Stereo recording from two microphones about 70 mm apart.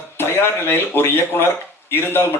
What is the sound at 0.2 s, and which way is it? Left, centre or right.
Speech, left.